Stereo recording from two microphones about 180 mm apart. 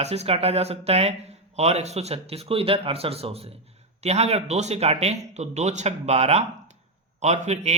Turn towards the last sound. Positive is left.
turn(degrees=-40)  # may be behind; listen again after turning